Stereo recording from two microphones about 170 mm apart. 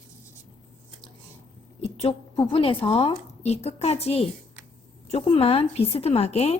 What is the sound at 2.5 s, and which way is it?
Speech, 30° left (ahead or behind).